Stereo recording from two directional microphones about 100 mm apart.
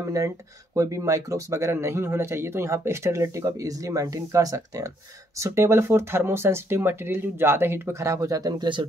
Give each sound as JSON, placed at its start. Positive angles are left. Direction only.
{"t": 0.0, "sound": "speech", "side_deg": -30}